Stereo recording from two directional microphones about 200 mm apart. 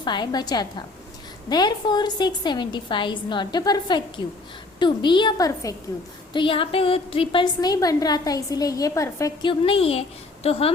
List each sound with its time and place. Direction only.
0.0 s a woman's voice: 20° left (ahead or behind)